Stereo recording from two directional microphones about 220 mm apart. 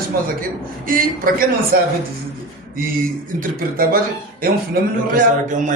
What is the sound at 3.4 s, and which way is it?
A man's voice, 40° right (ahead or behind).